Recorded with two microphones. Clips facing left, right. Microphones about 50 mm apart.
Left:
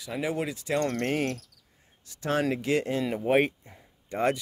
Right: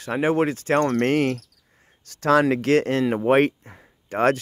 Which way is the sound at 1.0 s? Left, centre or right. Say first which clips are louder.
Right 8 dB; right.